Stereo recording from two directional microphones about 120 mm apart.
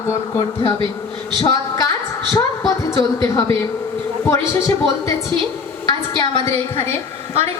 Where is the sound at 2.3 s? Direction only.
30° left (ahead or behind).